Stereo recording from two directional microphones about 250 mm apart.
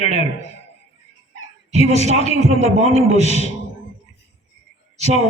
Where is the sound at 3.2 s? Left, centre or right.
Left.